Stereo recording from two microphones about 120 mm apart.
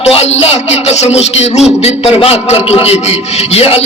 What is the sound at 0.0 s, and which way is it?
A man's voice, 60° left (ahead or behind).